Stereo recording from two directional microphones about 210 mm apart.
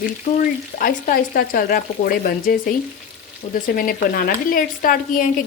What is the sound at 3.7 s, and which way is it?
Speech, 45° left (ahead or behind).